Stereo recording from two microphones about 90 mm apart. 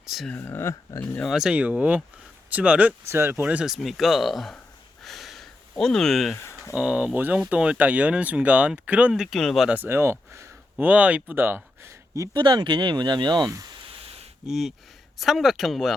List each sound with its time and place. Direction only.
0.0 s a sound: 5° right (ahead or behind)
0.3 s speech: 20° left (ahead or behind)
0.6 s speech: 35° left (ahead or behind)
1.2 s speech: centre (ahead or behind)
3.0 s speech: 30° right (ahead or behind)
3.7 s speech: centre (ahead or behind)
5.0 s a sound: centre (ahead or behind)
6.3 s speech: 30° left (ahead or behind)
6.7 s speech: 10° right (ahead or behind)
9.6 s speech: 20° right (ahead or behind)
10.8 s speech: 15° right (ahead or behind); by 12.4 s 35° right (ahead or behind)
12.4 s speech: 55° right (ahead or behind)
14.4 s speech: 5° right (ahead or behind)